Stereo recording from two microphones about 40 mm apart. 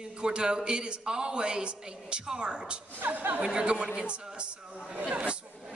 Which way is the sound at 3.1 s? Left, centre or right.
Right.